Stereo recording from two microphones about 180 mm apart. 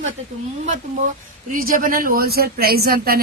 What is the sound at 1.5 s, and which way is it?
Speech, 50° right (ahead or behind).